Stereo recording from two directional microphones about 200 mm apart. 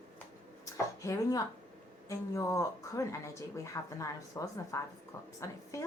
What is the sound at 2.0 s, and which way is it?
Speech, 15° left (ahead or behind).